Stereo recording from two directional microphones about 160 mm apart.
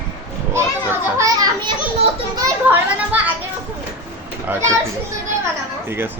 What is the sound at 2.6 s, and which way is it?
Children playing, 10° right (ahead or behind).